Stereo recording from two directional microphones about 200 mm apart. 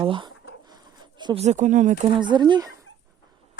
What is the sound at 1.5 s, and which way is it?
Speech, 35° right (ahead or behind).